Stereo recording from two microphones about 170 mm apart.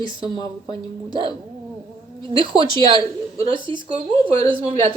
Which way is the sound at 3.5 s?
30° right (ahead or behind).